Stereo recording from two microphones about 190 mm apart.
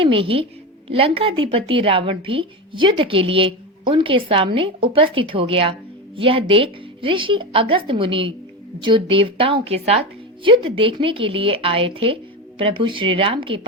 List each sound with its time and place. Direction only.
0.0 s a woman's voice: 30° right (ahead or behind)